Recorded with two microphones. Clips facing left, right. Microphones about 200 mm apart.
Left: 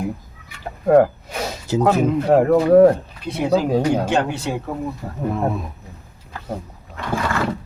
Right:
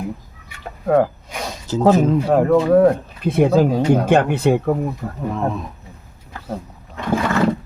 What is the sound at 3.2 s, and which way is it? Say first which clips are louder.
Speech: right 4 dB; 55° right (ahead or behind).